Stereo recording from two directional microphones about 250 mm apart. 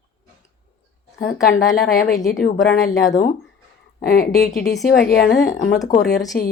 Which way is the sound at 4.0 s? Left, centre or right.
Left.